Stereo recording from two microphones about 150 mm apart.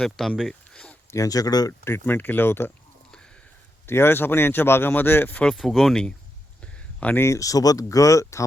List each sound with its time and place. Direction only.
0.0 s speech: centre (ahead or behind)
1.1 s speech: 25° left (ahead or behind)
3.8 s speech: 15° left (ahead or behind)